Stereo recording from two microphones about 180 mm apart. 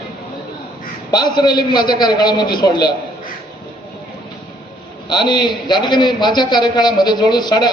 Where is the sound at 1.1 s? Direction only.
25° left (ahead or behind).